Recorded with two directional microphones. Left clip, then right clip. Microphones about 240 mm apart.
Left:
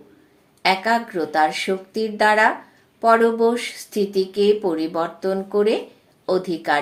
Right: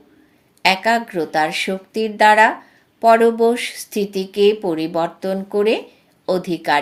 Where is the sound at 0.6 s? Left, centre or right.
Right.